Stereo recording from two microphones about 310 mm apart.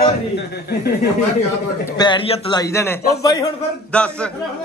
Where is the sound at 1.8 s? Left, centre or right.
Centre.